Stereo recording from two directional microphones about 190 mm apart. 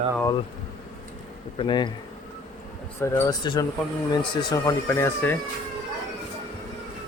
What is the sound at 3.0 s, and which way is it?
Speech, 15° left (ahead or behind).